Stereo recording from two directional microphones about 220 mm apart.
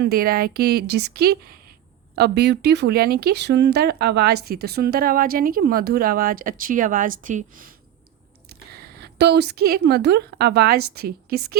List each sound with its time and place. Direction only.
0.0 s speech: 45° right (ahead or behind)
8.8 s a woman's voice: 45° right (ahead or behind)